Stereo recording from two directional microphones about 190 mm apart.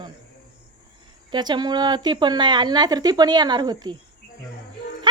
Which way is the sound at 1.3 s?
25° right (ahead or behind).